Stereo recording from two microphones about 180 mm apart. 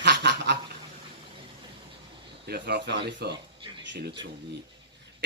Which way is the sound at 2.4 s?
65° right (ahead or behind).